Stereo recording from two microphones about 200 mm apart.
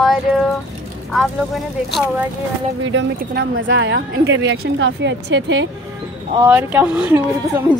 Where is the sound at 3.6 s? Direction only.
70° right (ahead or behind).